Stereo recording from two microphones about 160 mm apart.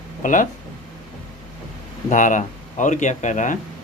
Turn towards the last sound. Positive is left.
turn(degrees=50)  # may be behind; listen again after turning